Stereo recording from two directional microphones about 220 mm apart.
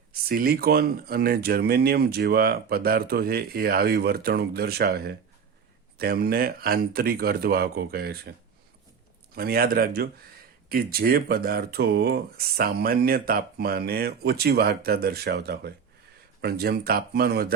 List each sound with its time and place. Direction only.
0.3 s speech: 45° right (ahead or behind)